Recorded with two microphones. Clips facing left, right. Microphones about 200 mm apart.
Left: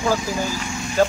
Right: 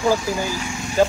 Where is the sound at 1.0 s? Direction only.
10° right (ahead or behind).